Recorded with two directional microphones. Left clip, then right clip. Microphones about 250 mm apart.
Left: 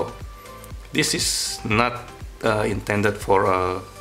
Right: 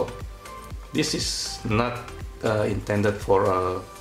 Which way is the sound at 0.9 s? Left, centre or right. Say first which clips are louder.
Left 4 dB; centre.